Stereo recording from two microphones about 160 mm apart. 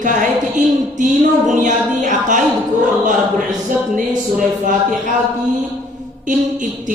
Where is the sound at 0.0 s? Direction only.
55° right (ahead or behind).